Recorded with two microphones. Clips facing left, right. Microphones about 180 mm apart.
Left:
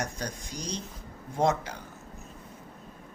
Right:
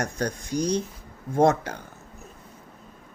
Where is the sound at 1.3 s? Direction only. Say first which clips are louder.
Right 6 dB; 50° right (ahead or behind).